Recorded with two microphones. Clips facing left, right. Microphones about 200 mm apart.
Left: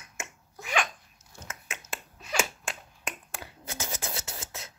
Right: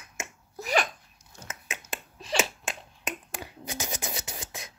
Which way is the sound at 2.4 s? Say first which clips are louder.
Right 1 dB; 20° right (ahead or behind).